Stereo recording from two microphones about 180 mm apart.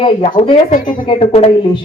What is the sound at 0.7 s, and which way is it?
Speech, 50° left (ahead or behind).